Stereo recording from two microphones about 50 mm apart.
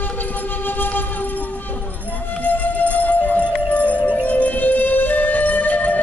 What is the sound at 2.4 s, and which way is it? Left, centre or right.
Music, left.